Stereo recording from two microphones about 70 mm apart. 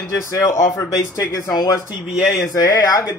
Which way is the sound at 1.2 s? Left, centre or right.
Left.